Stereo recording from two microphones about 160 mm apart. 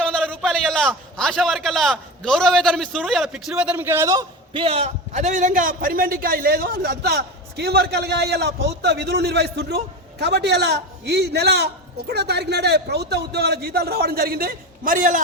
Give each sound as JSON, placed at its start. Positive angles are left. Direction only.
{"t": 0.0, "sound": "a man's voice", "side_deg": 5}